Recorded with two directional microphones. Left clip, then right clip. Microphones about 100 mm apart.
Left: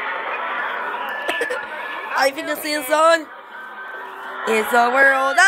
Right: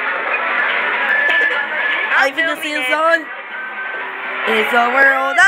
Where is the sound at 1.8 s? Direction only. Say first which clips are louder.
Right 9 dB; 5° right (ahead or behind).